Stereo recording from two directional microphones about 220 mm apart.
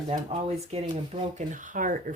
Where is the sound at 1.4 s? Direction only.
35° right (ahead or behind).